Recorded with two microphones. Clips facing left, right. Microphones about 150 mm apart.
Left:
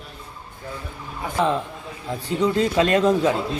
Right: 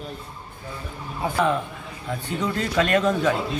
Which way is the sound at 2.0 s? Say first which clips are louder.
Left 5 dB; 30° left (ahead or behind).